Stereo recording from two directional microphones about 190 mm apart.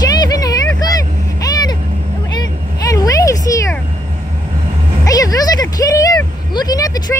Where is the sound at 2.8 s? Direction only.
20° left (ahead or behind).